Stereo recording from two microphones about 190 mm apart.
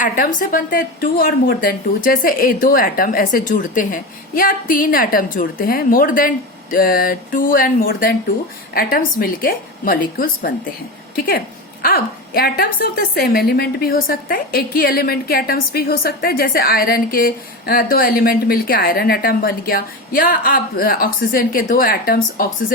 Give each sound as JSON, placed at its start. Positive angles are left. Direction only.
{"t": 0.0, "sound": "a woman's voice", "side_deg": 45}
{"t": 11.8, "sound": "a woman's voice", "side_deg": 50}